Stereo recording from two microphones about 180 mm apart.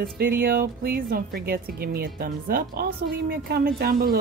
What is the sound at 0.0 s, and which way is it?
Speech, 55° right (ahead or behind).